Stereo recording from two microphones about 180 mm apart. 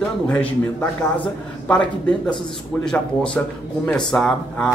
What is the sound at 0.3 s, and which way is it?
A man's voice, 10° left (ahead or behind).